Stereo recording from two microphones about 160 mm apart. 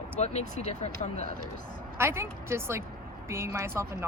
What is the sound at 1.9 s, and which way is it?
A woman's voice, 15° right (ahead or behind).